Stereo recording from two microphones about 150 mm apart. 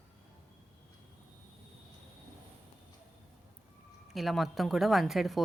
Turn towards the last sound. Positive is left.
turn(degrees=0)  # may be behind; listen again after turning